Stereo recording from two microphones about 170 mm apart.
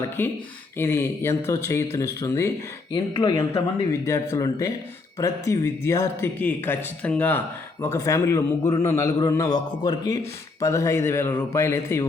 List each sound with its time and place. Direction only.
0.2 s speech: 15° left (ahead or behind)
2.9 s speech: 25° left (ahead or behind)
4.0 s speech: 20° left (ahead or behind)